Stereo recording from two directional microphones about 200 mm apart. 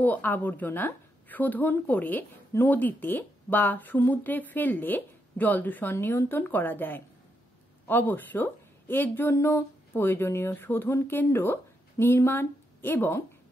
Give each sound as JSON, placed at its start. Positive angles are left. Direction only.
{"t": 0.0, "sound": "speech", "side_deg": 10}